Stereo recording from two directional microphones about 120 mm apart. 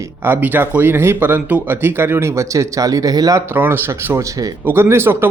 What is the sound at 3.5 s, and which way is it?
Speech, 15° right (ahead or behind).